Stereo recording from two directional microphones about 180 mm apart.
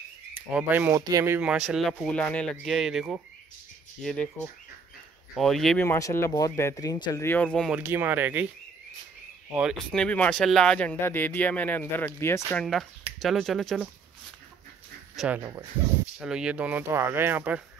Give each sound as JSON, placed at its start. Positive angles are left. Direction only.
{"t": 0.5, "sound": "speech", "side_deg": -10}
{"t": 5.3, "sound": "speech", "side_deg": 0}
{"t": 5.9, "sound": "speech", "side_deg": 15}
{"t": 7.7, "sound": "speech", "side_deg": -10}
{"t": 9.6, "sound": "speech", "side_deg": 0}
{"t": 15.1, "sound": "speech", "side_deg": -10}